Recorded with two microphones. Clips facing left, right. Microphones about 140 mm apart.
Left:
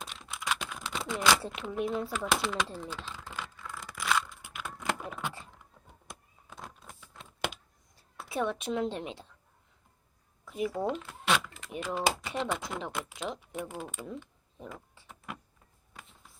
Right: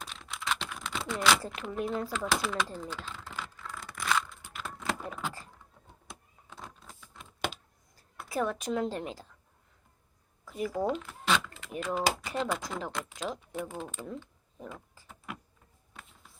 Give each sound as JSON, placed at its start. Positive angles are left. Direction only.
{"t": 0.3, "sound": "typing", "side_deg": 10}
{"t": 1.1, "sound": "speech", "side_deg": 5}
{"t": 3.6, "sound": "a sound", "side_deg": 5}
{"t": 6.5, "sound": "keys jangling", "side_deg": 15}
{"t": 8.2, "sound": "speech", "side_deg": 0}
{"t": 10.4, "sound": "speech", "side_deg": 0}
{"t": 11.1, "sound": "a sound", "side_deg": 10}
{"t": 11.8, "sound": "speech", "side_deg": 5}